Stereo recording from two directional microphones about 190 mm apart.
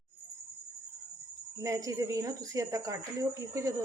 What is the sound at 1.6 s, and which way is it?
Speech, 15° right (ahead or behind).